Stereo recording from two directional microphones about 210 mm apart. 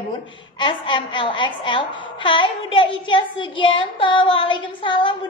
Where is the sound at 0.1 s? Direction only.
25° left (ahead or behind).